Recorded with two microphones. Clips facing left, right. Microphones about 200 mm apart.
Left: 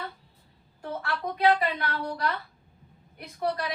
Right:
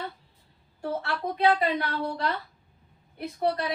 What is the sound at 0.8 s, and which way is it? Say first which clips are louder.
Speech: right 2 dB; 25° right (ahead or behind).